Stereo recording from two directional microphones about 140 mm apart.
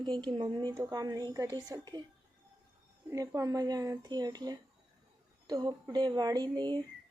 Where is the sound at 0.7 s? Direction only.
20° right (ahead or behind).